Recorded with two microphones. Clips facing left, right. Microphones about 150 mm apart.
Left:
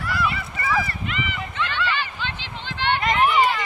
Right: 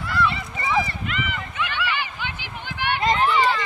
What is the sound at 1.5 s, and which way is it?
Hubbub, 15° right (ahead or behind).